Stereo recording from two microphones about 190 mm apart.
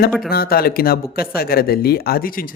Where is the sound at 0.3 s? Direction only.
55° left (ahead or behind).